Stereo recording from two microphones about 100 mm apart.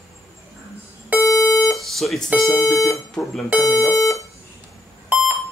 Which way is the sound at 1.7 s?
Centre (ahead or behind).